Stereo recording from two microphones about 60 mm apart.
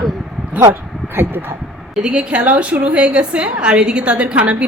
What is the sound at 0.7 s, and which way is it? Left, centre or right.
Speech, right.